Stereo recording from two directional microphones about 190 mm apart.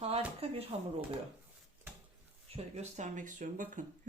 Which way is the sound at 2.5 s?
35° right (ahead or behind).